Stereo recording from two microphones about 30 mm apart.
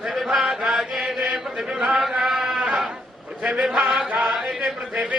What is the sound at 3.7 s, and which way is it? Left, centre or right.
Chant, right.